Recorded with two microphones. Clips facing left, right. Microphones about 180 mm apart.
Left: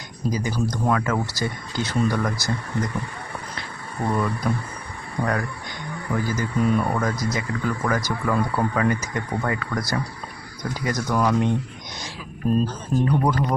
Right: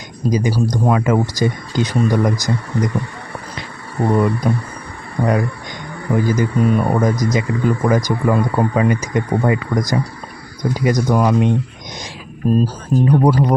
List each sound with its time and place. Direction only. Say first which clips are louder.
0.3 s speech: right 7 dB; 20° right (ahead or behind)
4.0 s speech: right 8 dB; 25° right (ahead or behind)
12.6 s speech: right 6 dB; 10° right (ahead or behind)